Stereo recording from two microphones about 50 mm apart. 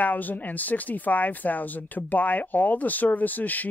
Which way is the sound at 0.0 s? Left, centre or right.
Left.